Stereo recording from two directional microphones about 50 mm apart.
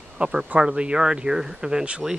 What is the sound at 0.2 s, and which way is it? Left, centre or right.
Speech, centre.